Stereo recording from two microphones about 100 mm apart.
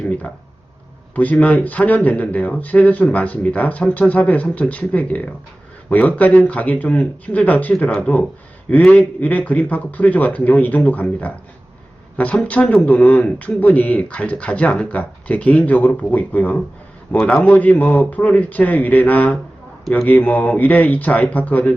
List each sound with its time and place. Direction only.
1.1 s speech: 15° left (ahead or behind)